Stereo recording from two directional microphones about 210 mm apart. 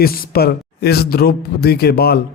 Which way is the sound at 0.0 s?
45° left (ahead or behind).